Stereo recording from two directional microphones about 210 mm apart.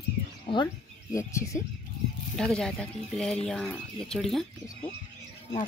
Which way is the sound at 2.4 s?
5° left (ahead or behind).